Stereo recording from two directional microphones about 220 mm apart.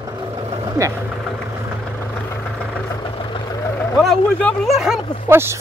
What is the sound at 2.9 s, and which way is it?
Vehicle, 20° left (ahead or behind).